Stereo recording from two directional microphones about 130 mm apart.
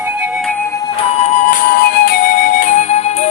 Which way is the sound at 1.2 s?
65° left (ahead or behind).